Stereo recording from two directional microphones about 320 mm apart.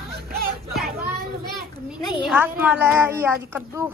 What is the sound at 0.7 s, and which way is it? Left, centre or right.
Children playing, centre.